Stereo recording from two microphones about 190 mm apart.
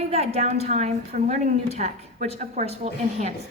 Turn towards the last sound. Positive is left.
turn(degrees=-35)  # may be behind; listen again after turning